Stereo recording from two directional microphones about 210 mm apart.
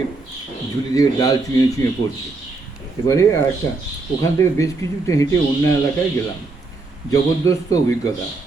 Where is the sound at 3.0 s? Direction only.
15° left (ahead or behind).